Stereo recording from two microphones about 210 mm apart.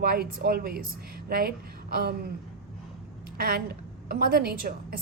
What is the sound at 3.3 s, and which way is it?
A woman's voice, 45° right (ahead or behind).